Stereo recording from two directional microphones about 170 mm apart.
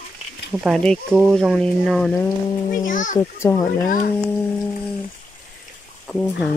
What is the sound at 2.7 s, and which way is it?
Speech, 50° left (ahead or behind).